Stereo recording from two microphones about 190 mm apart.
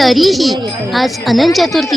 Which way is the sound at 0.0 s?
Centre (ahead or behind).